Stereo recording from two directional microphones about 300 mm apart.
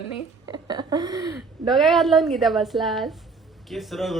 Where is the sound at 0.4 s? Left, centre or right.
Centre.